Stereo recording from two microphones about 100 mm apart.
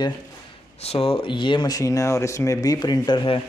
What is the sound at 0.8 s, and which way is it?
Speech, 80° left.